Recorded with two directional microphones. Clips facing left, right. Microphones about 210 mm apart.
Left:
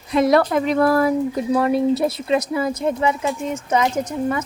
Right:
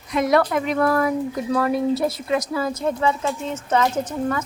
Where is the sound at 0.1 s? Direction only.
30° left (ahead or behind).